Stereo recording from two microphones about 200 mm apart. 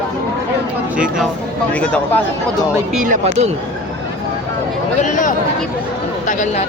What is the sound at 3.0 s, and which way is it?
Speech, 40° right (ahead or behind).